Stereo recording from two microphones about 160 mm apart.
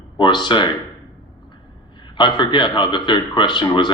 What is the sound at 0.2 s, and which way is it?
Speech, 30° left (ahead or behind).